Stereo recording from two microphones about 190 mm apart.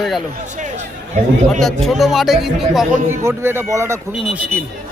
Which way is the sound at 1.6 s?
Centre (ahead or behind).